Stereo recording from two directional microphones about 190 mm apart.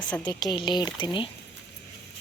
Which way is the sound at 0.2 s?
20° left (ahead or behind).